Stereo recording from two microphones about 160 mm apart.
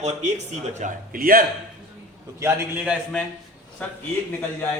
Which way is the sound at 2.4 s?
15° right (ahead or behind).